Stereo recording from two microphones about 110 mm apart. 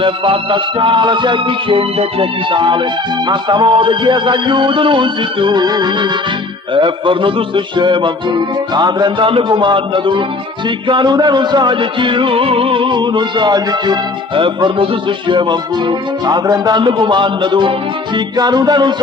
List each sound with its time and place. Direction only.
0.0 s music: 50° right (ahead or behind)